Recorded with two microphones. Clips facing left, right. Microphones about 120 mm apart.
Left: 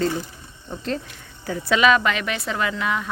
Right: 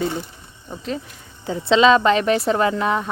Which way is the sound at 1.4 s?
25° right (ahead or behind).